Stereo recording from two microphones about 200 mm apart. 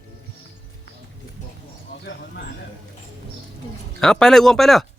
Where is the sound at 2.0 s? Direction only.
60° left (ahead or behind).